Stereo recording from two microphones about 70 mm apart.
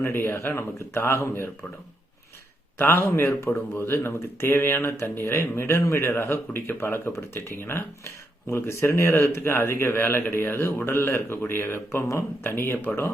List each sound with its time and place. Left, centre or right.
0.0 s speech: left
2.7 s speech: left